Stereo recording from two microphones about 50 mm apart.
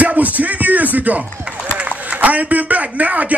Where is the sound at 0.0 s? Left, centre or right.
Right.